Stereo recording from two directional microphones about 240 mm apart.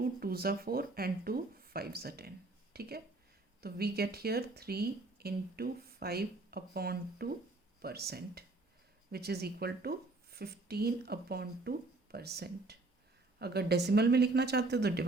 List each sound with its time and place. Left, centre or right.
0.0 s speech: right